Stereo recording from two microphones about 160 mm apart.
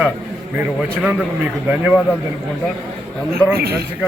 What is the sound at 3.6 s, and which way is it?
Speech, 80° right.